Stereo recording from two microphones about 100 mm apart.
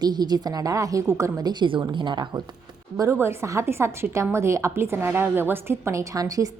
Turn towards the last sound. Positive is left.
turn(degrees=-35)  # may be behind; listen again after turning